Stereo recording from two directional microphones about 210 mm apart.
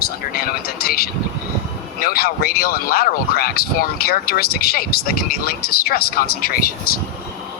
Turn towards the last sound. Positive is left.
turn(degrees=45)  # may be behind; listen again after turning